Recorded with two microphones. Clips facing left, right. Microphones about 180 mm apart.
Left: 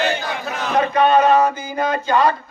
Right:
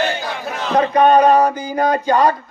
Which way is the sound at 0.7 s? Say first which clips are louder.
Right 3 dB; 40° right (ahead or behind).